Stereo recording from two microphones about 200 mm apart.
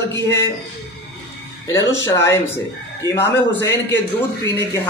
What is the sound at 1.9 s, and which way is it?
Speech, 15° left (ahead or behind).